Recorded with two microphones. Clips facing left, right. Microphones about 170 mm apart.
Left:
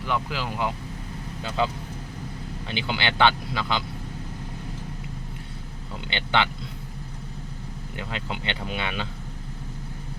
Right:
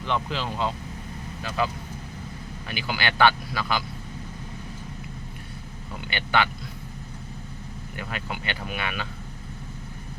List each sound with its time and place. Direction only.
0.0 s speech: 10° left (ahead or behind)
1.4 s speech: 25° left (ahead or behind)
6.1 s speech: 20° left (ahead or behind)
7.9 s speech: 20° left (ahead or behind)